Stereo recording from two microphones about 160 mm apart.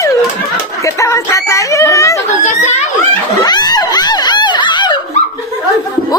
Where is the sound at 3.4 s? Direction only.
25° left (ahead or behind).